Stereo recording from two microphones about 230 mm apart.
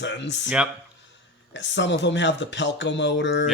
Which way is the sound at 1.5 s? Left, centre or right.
Left.